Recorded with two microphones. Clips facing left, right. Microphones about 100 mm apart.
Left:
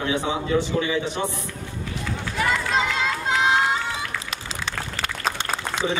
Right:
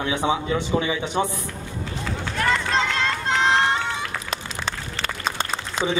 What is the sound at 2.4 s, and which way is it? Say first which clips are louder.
Run: right 1 dB; 5° left (ahead or behind).